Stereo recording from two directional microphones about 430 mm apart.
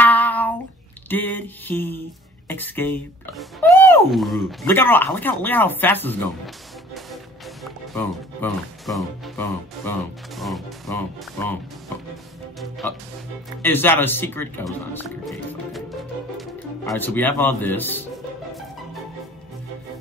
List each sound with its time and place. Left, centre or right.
0.0 s a sound: centre
1.0 s speech: centre
13.6 s speech: centre